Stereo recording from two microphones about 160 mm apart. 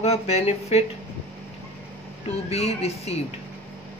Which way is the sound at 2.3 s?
40° left (ahead or behind).